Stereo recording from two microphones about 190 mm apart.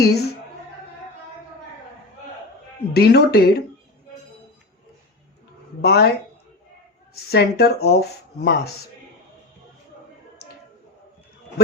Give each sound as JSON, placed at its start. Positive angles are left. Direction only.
{"t": 0.0, "sound": "speech", "side_deg": 55}
{"t": 2.9, "sound": "speech", "side_deg": 55}
{"t": 5.8, "sound": "speech", "side_deg": 55}
{"t": 7.3, "sound": "speech", "side_deg": 55}